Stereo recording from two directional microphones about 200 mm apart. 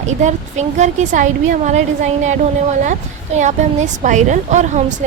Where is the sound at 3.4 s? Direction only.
35° right (ahead or behind).